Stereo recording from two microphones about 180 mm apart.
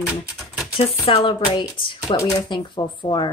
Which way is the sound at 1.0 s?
30° left (ahead or behind).